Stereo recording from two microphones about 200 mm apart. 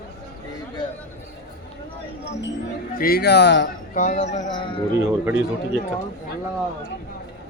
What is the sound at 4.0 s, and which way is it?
Speech, 40° left (ahead or behind).